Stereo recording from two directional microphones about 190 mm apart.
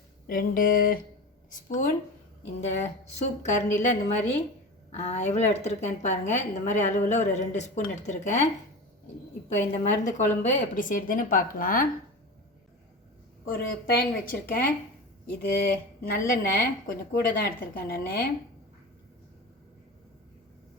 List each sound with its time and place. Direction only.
0.3 s speech: 45° left (ahead or behind)
2.4 s a woman's voice: 35° left (ahead or behind)
9.5 s speech: 40° left (ahead or behind)
13.5 s speech: 50° left (ahead or behind)